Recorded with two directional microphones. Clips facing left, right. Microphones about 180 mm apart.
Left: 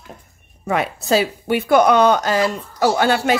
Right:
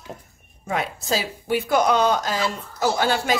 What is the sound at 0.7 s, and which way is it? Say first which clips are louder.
Speech: left 6 dB; 65° left (ahead or behind).